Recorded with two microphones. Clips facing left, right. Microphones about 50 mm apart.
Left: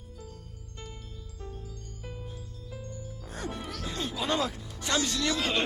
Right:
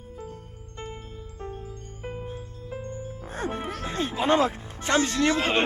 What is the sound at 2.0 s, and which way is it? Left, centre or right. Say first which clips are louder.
Music: right 9 dB; right.